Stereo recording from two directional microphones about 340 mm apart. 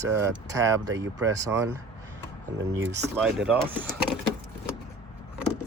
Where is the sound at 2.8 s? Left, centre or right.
Centre.